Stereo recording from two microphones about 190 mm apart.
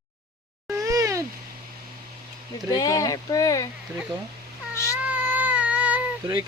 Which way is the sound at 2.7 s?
20° left (ahead or behind).